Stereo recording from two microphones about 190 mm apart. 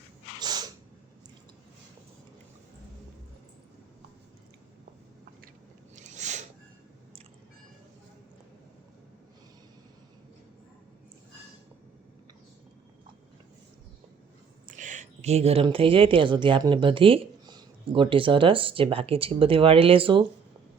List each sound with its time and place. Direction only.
0.3 s sneeze: 20° right (ahead or behind)
6.0 s a sound: 40° right (ahead or behind)
14.7 s speech: 40° right (ahead or behind)